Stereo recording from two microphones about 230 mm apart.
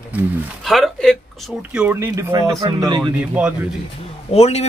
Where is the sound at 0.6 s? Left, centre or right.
Centre.